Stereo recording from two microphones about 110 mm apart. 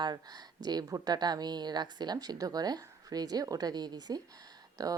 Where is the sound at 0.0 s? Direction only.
40° right (ahead or behind).